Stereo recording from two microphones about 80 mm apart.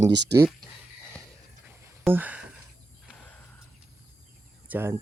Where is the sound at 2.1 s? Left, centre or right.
Right.